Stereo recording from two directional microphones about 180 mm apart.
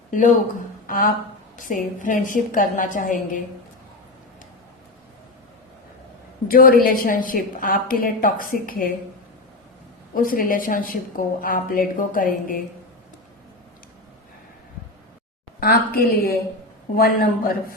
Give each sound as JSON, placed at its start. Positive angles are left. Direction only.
{"t": 0.1, "sound": "a man's voice", "side_deg": 45}
{"t": 6.5, "sound": "a woman's voice", "side_deg": 50}
{"t": 10.2, "sound": "a woman's voice", "side_deg": 50}
{"t": 15.6, "sound": "a woman's voice", "side_deg": 55}